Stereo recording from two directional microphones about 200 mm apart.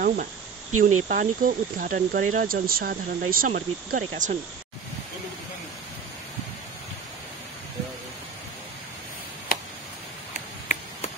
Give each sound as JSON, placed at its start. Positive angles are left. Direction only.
{"t": 0.0, "sound": "speech", "side_deg": -45}
{"t": 0.7, "sound": "speech", "side_deg": -90}
{"t": 1.0, "sound": "speech", "side_deg": -40}